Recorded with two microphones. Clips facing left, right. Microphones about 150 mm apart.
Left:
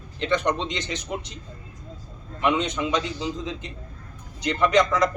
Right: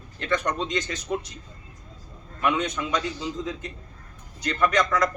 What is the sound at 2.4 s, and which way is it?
A man's voice, 25° left (ahead or behind).